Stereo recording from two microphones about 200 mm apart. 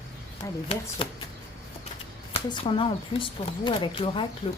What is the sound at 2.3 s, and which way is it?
Speech, 25° left (ahead or behind).